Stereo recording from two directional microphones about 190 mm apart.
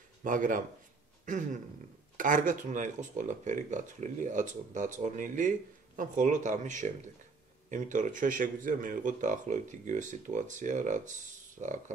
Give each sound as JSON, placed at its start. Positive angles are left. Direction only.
{"t": 0.2, "sound": "speech", "side_deg": -45}
{"t": 1.2, "sound": "a sound", "side_deg": -40}
{"t": 2.1, "sound": "speech", "side_deg": -45}